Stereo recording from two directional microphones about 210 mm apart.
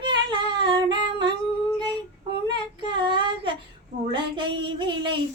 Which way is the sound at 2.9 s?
20° right (ahead or behind).